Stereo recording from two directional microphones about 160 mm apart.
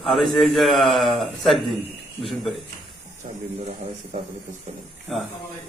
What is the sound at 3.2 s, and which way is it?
Speech, 45° right (ahead or behind).